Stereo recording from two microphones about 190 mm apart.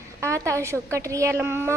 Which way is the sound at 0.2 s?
15° right (ahead or behind).